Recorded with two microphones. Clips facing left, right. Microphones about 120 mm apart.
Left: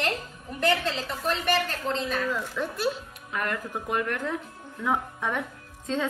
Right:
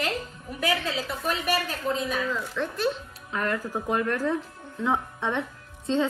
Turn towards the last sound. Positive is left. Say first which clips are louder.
# right 4 dB
turn(degrees=-30)  # may be behind; listen again after turning